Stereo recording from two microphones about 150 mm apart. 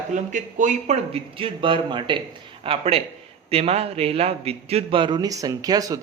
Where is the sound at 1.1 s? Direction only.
35° right (ahead or behind).